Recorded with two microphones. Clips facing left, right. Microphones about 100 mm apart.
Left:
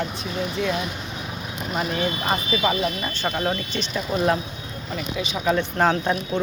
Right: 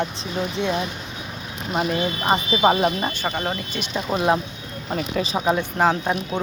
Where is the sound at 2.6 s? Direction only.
45° right (ahead or behind).